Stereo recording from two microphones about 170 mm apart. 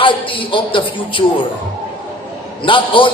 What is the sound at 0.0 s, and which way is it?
A man's voice, 30° left (ahead or behind).